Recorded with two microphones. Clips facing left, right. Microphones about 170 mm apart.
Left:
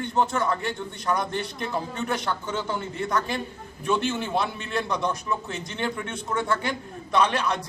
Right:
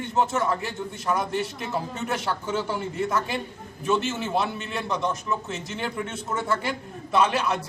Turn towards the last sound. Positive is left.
turn(degrees=-5)  # may be behind; listen again after turning